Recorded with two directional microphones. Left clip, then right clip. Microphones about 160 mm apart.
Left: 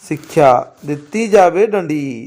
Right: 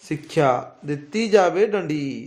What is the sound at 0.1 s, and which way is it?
A man's voice, 30° left (ahead or behind).